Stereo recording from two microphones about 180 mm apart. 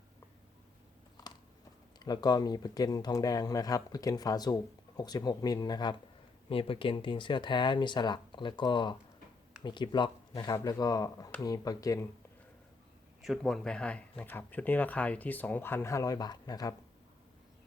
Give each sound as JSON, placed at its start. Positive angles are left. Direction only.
{"t": 2.0, "sound": "speech", "side_deg": 20}
{"t": 13.2, "sound": "speech", "side_deg": 0}